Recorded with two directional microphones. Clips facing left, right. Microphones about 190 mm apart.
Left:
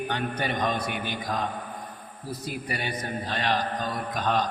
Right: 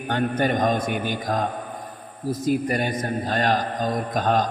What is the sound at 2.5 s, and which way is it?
A man's voice, 45° right (ahead or behind).